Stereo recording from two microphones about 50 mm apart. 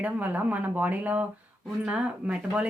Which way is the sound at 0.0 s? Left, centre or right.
Right.